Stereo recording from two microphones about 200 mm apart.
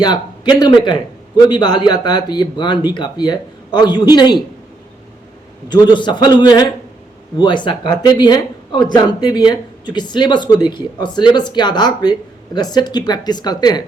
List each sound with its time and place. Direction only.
0.0 s speech: 20° left (ahead or behind)
5.9 s speech: 20° left (ahead or behind)